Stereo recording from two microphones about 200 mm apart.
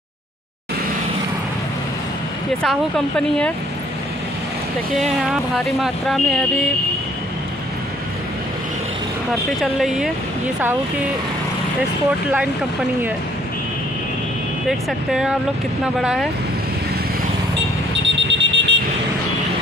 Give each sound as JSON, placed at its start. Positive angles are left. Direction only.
{"t": 2.6, "sound": "speech", "side_deg": 5}
{"t": 4.9, "sound": "speech", "side_deg": 0}
{"t": 9.6, "sound": "speech", "side_deg": 0}
{"t": 14.7, "sound": "speech", "side_deg": 0}
{"t": 18.0, "sound": "alarm", "side_deg": -65}